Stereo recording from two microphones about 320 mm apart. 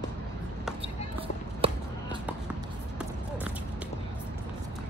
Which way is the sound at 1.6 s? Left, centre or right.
Centre.